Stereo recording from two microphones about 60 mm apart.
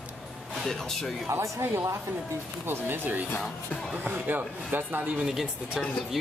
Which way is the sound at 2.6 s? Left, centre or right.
Right.